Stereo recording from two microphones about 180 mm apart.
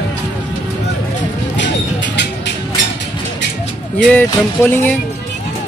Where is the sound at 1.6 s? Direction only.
80° left.